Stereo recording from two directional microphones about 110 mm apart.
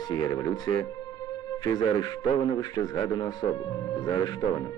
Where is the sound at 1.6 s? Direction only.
35° left (ahead or behind).